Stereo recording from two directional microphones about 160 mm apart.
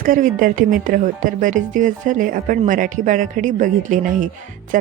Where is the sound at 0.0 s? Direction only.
60° right (ahead or behind).